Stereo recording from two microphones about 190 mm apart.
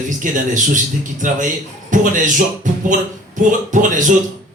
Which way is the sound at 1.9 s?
40° right (ahead or behind).